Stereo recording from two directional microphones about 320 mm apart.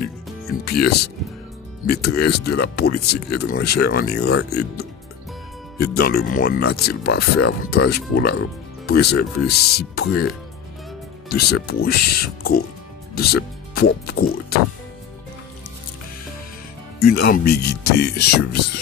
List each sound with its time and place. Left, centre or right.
0.7 s speech: left
11.2 s speech: left
17.0 s speech: left